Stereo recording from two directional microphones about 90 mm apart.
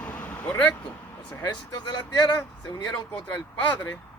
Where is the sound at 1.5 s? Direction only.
50° left (ahead or behind).